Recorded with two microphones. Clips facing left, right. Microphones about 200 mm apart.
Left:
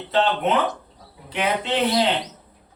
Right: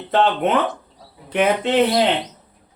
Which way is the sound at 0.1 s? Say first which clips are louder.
Right 3 dB; 55° right (ahead or behind).